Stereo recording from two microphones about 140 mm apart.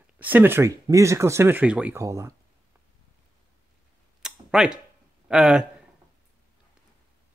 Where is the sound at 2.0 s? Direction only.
20° right (ahead or behind).